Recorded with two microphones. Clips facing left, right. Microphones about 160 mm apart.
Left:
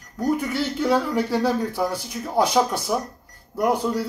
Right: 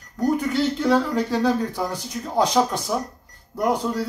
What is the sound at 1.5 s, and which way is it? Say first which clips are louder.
Speech: even; 15° right (ahead or behind).